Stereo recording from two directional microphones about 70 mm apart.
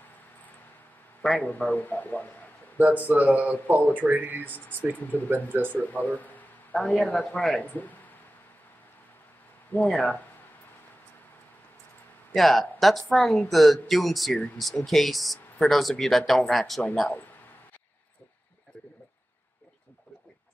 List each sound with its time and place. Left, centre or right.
1.4 s speech: centre
2.8 s speech: right
4.9 s speech: left
5.3 s speech: right
5.7 s speech: left
6.7 s speech: centre
7.6 s speech: left
9.7 s speech: left
12.4 s speech: centre